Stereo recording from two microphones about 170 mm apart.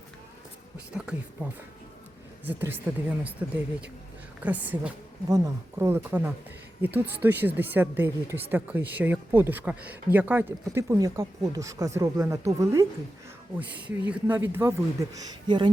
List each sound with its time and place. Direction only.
0.9 s speech: 5° right (ahead or behind); by 15.7 s 30° right (ahead or behind)